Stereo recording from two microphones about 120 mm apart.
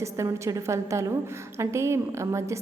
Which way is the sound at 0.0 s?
25° right (ahead or behind).